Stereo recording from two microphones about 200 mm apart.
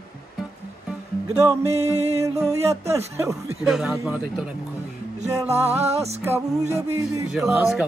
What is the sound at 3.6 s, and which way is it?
Speech, centre (ahead or behind).